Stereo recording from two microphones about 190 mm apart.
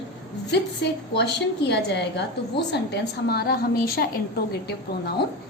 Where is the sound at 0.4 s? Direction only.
60° left (ahead or behind).